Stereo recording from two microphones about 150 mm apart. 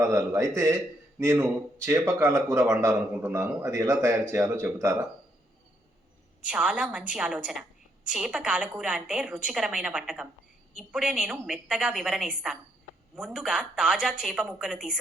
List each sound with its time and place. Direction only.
0.0 s speech: 20° right (ahead or behind)
6.5 s a woman's voice: 10° right (ahead or behind)